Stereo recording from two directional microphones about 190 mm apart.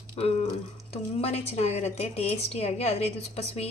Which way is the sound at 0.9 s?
35° left (ahead or behind).